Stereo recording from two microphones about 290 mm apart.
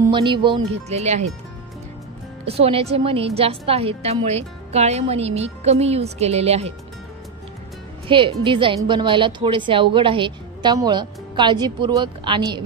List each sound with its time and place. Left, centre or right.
0.0 s a woman's voice: centre
2.4 s a woman's voice: centre
8.1 s a woman's voice: centre